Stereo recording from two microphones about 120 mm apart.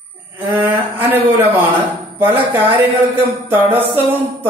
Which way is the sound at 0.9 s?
20° right (ahead or behind).